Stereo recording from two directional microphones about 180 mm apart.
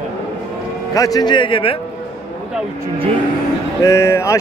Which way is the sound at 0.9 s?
20° left (ahead or behind).